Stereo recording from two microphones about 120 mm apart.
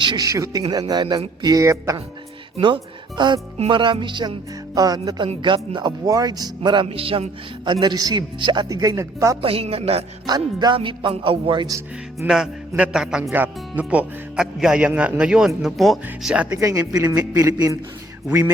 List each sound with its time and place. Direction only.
0.0 s speech: 40° right (ahead or behind)
0.3 s speech: 30° right (ahead or behind)
2.6 s speech: 40° right (ahead or behind)
6.1 s speech: 30° right (ahead or behind)
6.8 s speech: 50° right (ahead or behind); by 9.4 s 25° right (ahead or behind)
9.4 s a woman's voice: 55° right (ahead or behind)
10.2 s speech: 35° right (ahead or behind)
10.8 s speech: 50° right (ahead or behind)
12.2 s speech: 5° right (ahead or behind)
16.6 s speech: 30° right (ahead or behind)